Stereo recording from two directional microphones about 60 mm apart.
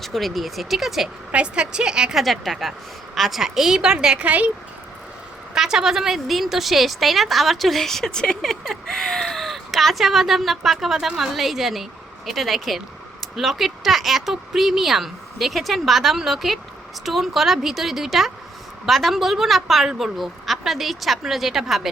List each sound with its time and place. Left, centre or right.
0.0 s speech: centre
1.3 s a woman's voice: centre
2.2 s a woman's voice: centre
4.3 s speech: right
5.5 s speech: centre